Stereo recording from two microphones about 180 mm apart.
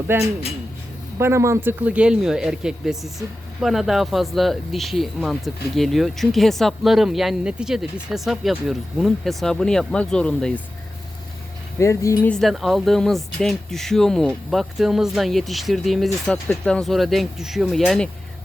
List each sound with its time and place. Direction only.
0.1 s speech: 15° right (ahead or behind); by 10.6 s 5° left (ahead or behind)
11.8 s speech: 15° left (ahead or behind)
12.3 s speech: centre (ahead or behind)